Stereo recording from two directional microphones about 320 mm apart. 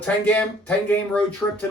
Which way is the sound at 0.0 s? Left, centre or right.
Centre.